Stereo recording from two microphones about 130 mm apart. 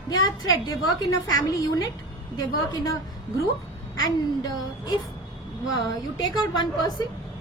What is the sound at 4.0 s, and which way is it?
A woman's voice, 30° left (ahead or behind).